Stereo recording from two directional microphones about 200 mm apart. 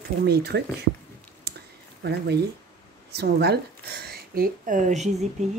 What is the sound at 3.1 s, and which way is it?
Speech, 55° right (ahead or behind).